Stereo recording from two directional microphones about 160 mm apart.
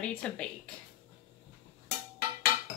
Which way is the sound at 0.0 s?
5° left (ahead or behind).